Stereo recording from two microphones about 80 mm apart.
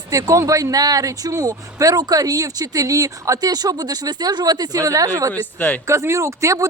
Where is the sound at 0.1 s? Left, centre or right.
Right.